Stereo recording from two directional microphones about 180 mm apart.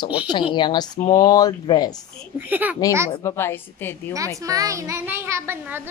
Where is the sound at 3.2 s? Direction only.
15° left (ahead or behind).